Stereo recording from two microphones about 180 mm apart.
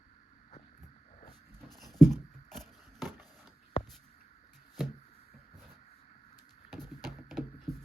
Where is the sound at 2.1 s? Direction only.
Centre (ahead or behind).